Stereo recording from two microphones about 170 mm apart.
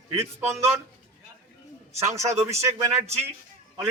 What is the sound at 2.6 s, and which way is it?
Speech, 15° right (ahead or behind).